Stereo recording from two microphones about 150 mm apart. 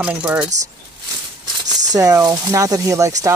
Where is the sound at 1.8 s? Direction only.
25° right (ahead or behind).